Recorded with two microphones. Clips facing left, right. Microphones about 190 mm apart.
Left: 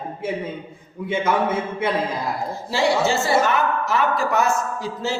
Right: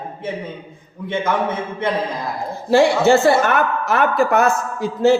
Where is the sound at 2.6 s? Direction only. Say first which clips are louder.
Right 7 dB; 55° right (ahead or behind).